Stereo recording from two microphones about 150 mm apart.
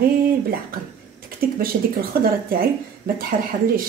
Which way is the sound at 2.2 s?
75° right (ahead or behind).